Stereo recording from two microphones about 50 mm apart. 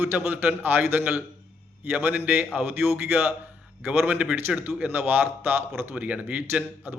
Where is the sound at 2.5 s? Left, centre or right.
Right.